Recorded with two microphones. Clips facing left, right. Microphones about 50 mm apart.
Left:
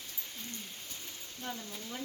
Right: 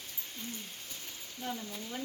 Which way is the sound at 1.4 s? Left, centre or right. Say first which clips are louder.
Right 3 dB; centre.